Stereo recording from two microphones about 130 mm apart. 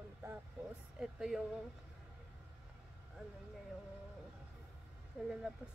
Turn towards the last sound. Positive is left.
turn(degrees=-10)  # may be behind; listen again after turning